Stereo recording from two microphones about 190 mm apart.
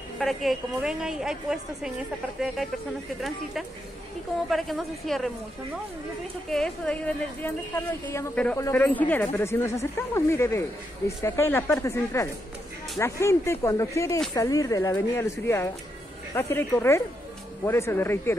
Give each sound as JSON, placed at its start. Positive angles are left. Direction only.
{"t": 0.2, "sound": "a woman's voice", "side_deg": 0}
{"t": 3.2, "sound": "a woman's voice", "side_deg": 0}
{"t": 6.5, "sound": "a woman's voice", "side_deg": 5}